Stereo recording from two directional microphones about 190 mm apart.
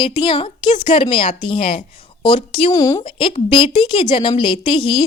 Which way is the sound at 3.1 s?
25° left (ahead or behind).